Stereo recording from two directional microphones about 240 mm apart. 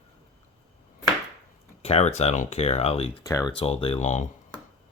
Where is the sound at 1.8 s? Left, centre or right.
Left.